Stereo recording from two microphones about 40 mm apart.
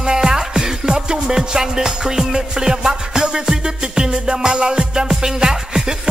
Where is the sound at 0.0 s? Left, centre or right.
Centre.